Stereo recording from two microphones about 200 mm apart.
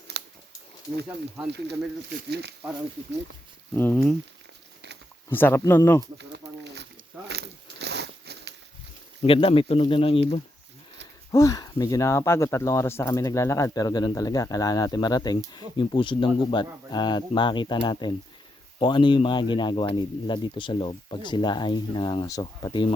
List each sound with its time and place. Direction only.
0.1 s scissors: 55° right (ahead or behind)
2.3 s speech: 55° right (ahead or behind)
3.8 s speech: 10° left (ahead or behind)
5.3 s speech: 10° left (ahead or behind)
6.1 s a sound: 60° right (ahead or behind)
9.2 s a man's voice: 30° left (ahead or behind)
11.3 s a man's voice: 15° left (ahead or behind)